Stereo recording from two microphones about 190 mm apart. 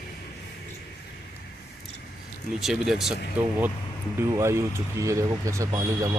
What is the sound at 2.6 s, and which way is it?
Speech, centre (ahead or behind).